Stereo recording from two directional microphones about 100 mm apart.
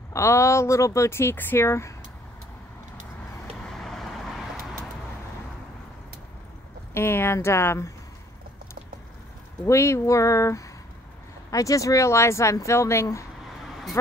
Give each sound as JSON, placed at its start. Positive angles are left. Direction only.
{"t": 0.1, "sound": "speech", "side_deg": 30}
{"t": 3.6, "sound": "vehicle", "side_deg": 5}
{"t": 6.9, "sound": "speech", "side_deg": 25}
{"t": 9.7, "sound": "speech", "side_deg": 30}